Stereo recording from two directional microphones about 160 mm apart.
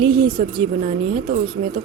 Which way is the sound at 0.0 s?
30° right (ahead or behind).